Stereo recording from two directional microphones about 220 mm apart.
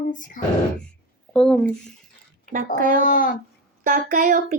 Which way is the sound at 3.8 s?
40° right (ahead or behind).